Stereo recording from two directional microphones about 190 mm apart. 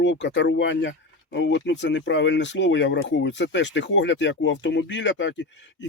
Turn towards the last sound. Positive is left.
turn(degrees=75)  # may be behind; listen again after turning